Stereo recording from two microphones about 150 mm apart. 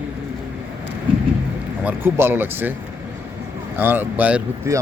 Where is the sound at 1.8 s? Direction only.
15° right (ahead or behind).